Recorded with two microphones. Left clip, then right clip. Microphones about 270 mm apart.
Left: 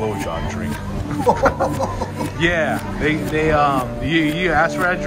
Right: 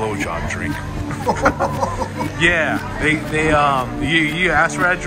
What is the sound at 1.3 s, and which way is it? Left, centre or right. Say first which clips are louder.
Speech: left 1 dB; centre.